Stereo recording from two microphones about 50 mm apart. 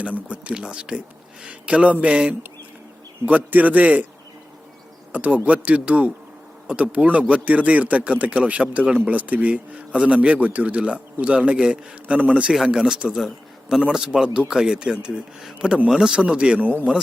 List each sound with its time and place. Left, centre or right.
0.0 s a man's voice: right
5.1 s speech: right; by 16.1 s centre
16.1 s speech: centre
16.6 s a man's voice: right